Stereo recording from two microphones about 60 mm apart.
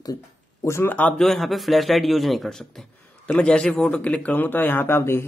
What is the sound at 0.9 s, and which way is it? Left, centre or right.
Speech, left.